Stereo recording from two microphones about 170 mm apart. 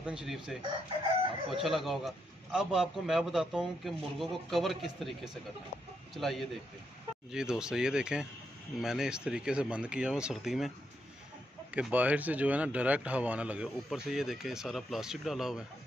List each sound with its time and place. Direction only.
0.0 s a man's voice: 5° right (ahead or behind)
11.7 s a man's voice: 10° right (ahead or behind)